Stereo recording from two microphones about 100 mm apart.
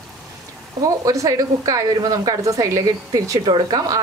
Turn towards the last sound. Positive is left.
turn(degrees=-40)  # may be behind; listen again after turning